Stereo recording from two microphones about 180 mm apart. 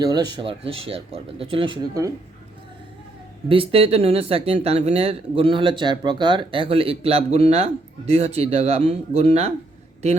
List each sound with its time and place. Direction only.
0.0 s speech: 25° right (ahead or behind)
3.5 s speech: 30° right (ahead or behind)